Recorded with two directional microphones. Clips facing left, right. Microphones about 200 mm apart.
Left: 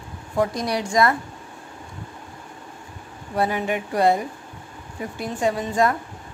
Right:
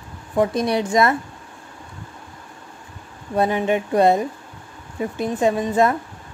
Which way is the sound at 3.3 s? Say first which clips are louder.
Right 4 dB; 20° right (ahead or behind).